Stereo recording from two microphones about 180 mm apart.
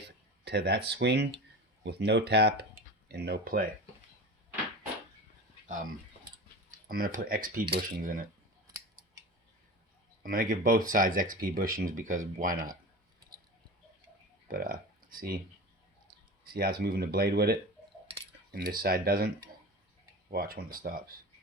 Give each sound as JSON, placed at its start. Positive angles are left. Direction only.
{"t": 0.4, "sound": "speech", "side_deg": -65}
{"t": 6.7, "sound": "speech", "side_deg": -55}
{"t": 10.2, "sound": "speech", "side_deg": -50}
{"t": 14.4, "sound": "speech", "side_deg": -50}
{"t": 16.4, "sound": "speech", "side_deg": -55}
{"t": 20.3, "sound": "speech", "side_deg": -55}